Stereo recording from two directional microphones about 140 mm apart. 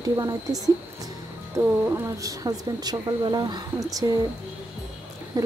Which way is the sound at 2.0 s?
25° right (ahead or behind).